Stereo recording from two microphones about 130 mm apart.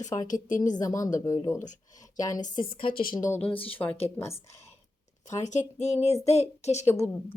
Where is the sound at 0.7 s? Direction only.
25° left (ahead or behind).